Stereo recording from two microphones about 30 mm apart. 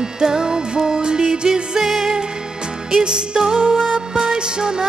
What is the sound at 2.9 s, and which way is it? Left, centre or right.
Music, right.